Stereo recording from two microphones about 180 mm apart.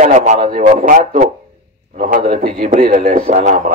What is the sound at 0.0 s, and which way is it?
Speech, 40° right (ahead or behind).